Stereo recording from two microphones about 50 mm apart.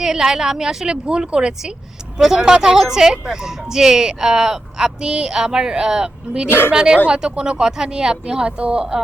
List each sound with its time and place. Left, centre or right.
0.0 s speech: centre